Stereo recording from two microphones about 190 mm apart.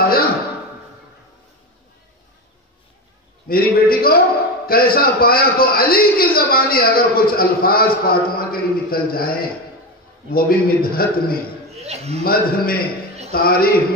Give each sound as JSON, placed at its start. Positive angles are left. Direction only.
{"t": 0.0, "sound": "music", "side_deg": 50}
{"t": 3.4, "sound": "a man's voice", "side_deg": 50}
{"t": 10.3, "sound": "a man's voice", "side_deg": 50}
{"t": 11.7, "sound": "a man's voice", "side_deg": -35}
{"t": 12.2, "sound": "a man's voice", "side_deg": 50}